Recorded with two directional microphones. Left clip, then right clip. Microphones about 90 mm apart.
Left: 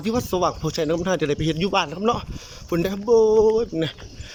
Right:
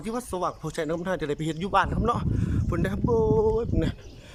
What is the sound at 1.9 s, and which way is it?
Speech, 25° left (ahead or behind).